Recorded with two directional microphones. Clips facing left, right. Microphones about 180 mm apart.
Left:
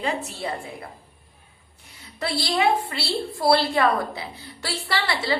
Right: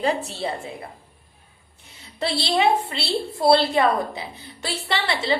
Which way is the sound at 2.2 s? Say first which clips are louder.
Right 2 dB; 25° right (ahead or behind).